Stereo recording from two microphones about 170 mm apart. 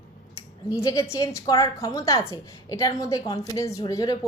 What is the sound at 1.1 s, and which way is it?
A woman's voice, 20° left (ahead or behind).